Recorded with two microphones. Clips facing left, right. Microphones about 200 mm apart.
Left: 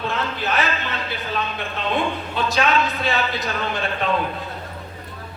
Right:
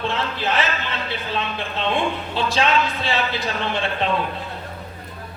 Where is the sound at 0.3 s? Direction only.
25° right (ahead or behind).